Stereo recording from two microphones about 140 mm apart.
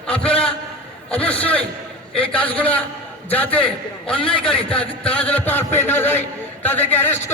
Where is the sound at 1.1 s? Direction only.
10° left (ahead or behind).